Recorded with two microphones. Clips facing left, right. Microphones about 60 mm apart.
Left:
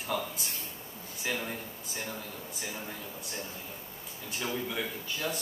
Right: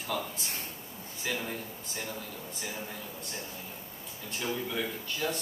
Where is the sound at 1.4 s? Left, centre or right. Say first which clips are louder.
Even; centre.